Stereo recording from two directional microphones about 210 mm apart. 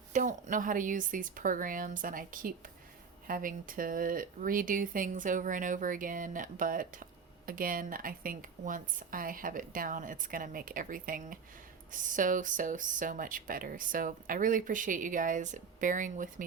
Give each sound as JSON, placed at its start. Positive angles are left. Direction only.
{"t": 0.1, "sound": "speech", "side_deg": -35}